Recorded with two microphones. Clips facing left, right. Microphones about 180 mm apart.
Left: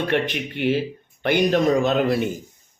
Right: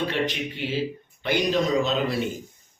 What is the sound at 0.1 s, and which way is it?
Speech, 60° left (ahead or behind).